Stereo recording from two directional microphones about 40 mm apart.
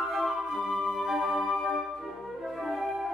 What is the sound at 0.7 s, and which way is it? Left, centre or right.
Music, centre.